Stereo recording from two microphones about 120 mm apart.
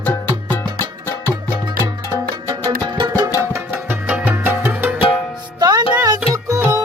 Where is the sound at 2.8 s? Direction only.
40° right (ahead or behind).